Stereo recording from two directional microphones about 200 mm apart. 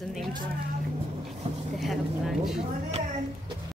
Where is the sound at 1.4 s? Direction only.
30° right (ahead or behind).